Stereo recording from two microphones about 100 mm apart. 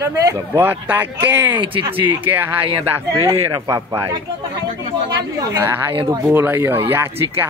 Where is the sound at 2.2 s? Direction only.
20° right (ahead or behind).